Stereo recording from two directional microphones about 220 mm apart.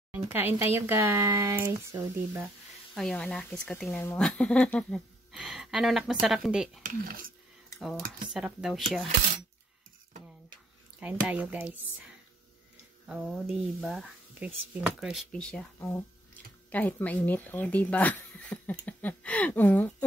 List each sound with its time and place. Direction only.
0.6 s speech: 10° right (ahead or behind)
2.9 s speech: centre (ahead or behind)
6.8 s speech: 40° right (ahead or behind)
8.3 s speech: 5° right (ahead or behind)
11.0 s speech: 5° right (ahead or behind)
13.0 s speech: 5° right (ahead or behind)